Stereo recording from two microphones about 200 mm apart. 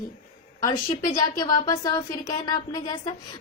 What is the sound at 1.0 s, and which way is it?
A woman's voice, 20° left (ahead or behind).